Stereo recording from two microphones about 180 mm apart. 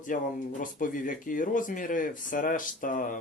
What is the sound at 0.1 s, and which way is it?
Speech, 50° left (ahead or behind).